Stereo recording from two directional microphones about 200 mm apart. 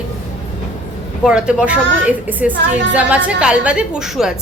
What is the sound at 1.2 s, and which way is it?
A woman's voice, 5° right (ahead or behind).